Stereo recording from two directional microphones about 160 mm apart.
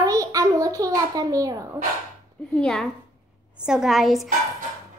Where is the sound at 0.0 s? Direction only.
20° right (ahead or behind).